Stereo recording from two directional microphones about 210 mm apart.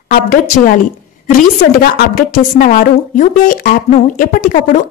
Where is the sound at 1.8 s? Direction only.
40° left (ahead or behind).